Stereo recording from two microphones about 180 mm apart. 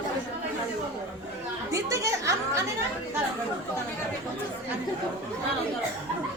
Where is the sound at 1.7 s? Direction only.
15° right (ahead or behind).